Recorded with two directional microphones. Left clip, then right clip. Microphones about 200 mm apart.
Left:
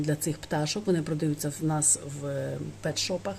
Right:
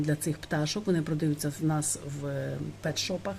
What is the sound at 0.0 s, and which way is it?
Speech, 5° left (ahead or behind).